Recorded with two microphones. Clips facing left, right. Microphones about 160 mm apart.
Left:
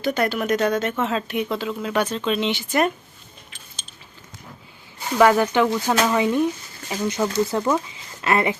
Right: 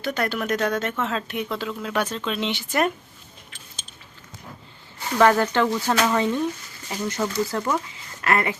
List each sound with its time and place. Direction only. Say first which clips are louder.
0.0 s speech: left 4 dB; centre (ahead or behind)
5.1 s speech: left 2 dB; 10° left (ahead or behind)